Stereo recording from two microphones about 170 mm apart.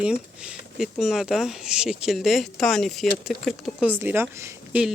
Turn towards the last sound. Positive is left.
turn(degrees=-15)  # may be behind; listen again after turning